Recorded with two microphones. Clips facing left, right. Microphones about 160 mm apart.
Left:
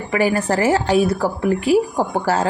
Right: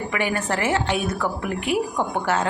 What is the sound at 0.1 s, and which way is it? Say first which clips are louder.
A woman's voice: left 9 dB; 35° left (ahead or behind).